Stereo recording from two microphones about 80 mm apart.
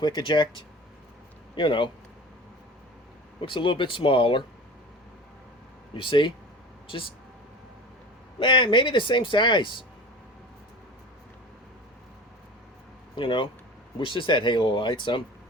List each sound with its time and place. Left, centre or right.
0.0 s speech: left
3.4 s speech: left
6.0 s speech: left
8.4 s speech: left
13.1 s speech: left